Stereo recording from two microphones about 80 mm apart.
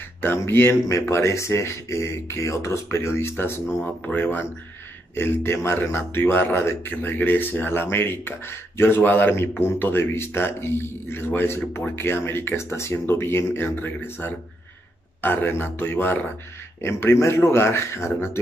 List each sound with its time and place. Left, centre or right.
0.2 s a man's voice: left